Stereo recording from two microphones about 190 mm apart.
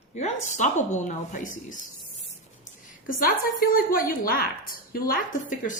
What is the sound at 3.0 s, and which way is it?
A woman's voice, 45° left (ahead or behind).